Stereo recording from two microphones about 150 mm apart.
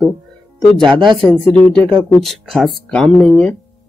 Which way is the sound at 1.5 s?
10° left (ahead or behind).